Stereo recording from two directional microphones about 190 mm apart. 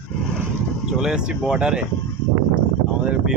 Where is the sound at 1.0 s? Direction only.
5° right (ahead or behind).